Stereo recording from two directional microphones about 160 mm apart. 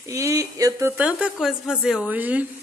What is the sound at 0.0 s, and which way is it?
A woman's voice, 20° right (ahead or behind).